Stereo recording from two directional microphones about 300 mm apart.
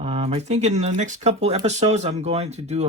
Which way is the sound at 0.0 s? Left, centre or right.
Centre.